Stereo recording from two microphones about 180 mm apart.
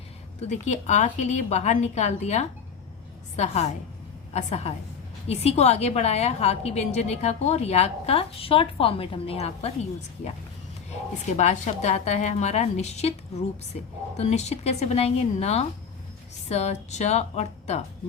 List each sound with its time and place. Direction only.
0.3 s a woman's voice: 40° left (ahead or behind)
11.3 s a woman's voice: 40° left (ahead or behind)
14.2 s a woman's voice: 35° left (ahead or behind)